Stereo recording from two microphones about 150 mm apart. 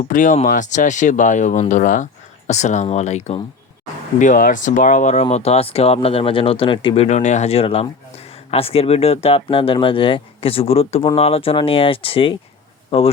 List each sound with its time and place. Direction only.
0.0 s speech: 60° left (ahead or behind)
4.2 s speech: 65° left (ahead or behind)
5.3 s speech: 45° left (ahead or behind)